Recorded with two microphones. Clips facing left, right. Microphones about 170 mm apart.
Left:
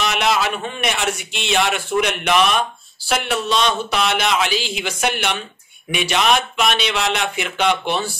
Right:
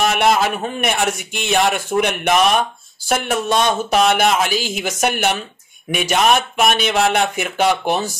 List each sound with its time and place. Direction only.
0.0 s speech: 50° right (ahead or behind)